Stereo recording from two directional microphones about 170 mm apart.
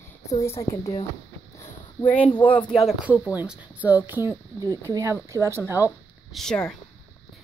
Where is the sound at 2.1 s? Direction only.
10° left (ahead or behind); by 5.7 s 15° right (ahead or behind).